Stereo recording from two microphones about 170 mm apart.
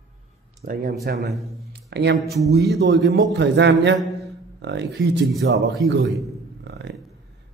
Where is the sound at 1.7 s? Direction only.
85° right.